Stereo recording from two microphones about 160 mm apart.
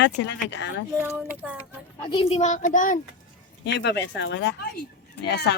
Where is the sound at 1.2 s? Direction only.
10° right (ahead or behind).